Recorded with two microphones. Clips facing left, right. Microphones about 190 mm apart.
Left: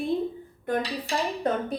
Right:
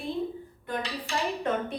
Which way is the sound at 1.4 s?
40° left (ahead or behind).